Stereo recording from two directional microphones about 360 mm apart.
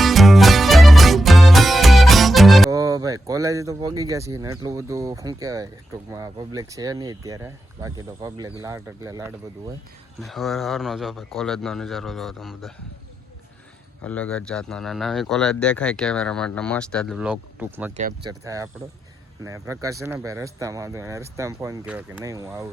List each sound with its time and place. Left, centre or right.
0.0 s music: centre
8.6 s speech: centre
14.0 s speech: centre
17.9 s speech: centre
18.4 s speech: centre